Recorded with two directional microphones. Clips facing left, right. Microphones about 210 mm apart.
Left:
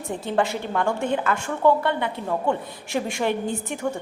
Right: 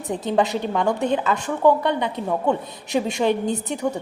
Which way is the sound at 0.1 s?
20° right (ahead or behind).